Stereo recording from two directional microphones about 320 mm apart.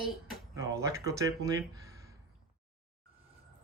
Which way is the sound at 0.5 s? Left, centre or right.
Centre.